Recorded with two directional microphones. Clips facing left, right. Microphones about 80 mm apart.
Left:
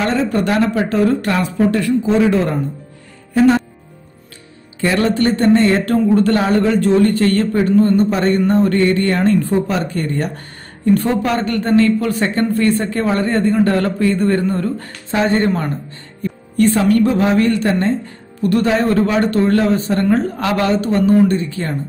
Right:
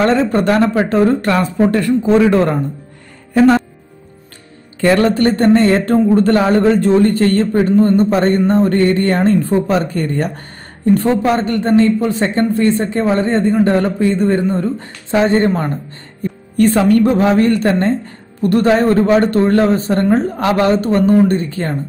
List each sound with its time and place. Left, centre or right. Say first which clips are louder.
0.0 s speech: right 4 dB; right
2.1 s speech: right 5 dB; right
4.7 s speech: right 4 dB; right
16.2 s speech: right 2 dB; right